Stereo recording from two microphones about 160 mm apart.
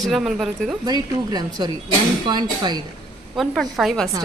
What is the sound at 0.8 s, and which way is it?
Speech, 25° right (ahead or behind).